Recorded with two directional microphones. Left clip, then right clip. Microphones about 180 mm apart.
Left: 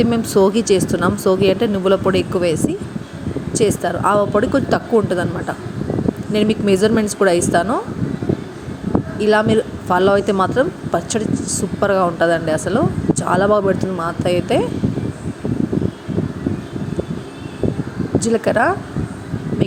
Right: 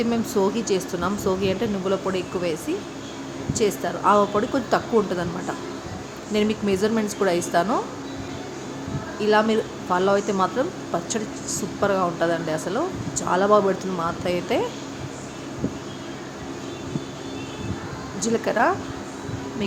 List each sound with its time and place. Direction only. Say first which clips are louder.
0.0 s speech: left 8 dB; 30° left (ahead or behind)
9.2 s speech: left 5 dB; 25° left (ahead or behind)
18.2 s speech: left 5 dB; 25° left (ahead or behind)